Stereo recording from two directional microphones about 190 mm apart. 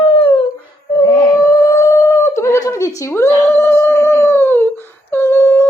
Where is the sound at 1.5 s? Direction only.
15° left (ahead or behind).